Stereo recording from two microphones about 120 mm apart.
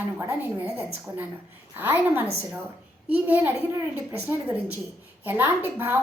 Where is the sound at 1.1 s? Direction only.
30° right (ahead or behind).